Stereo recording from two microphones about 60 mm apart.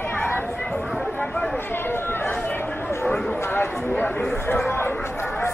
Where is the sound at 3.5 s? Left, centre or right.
Left.